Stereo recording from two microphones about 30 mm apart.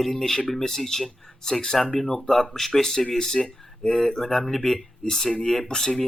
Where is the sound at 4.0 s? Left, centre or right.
Centre.